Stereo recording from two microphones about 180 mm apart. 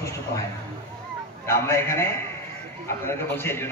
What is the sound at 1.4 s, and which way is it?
A man's voice, 15° left (ahead or behind).